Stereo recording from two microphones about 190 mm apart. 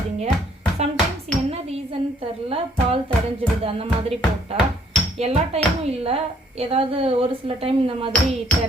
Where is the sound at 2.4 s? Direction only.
30° right (ahead or behind).